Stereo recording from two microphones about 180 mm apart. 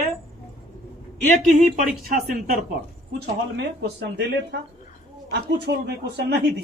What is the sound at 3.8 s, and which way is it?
Speech, 65° right (ahead or behind).